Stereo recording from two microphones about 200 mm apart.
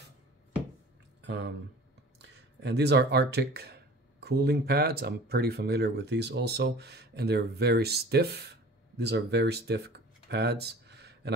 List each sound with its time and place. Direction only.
1.2 s speech: 60° right (ahead or behind)
2.6 s speech: 55° right (ahead or behind)